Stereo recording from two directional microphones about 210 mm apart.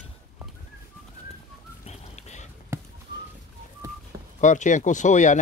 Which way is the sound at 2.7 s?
10° right (ahead or behind).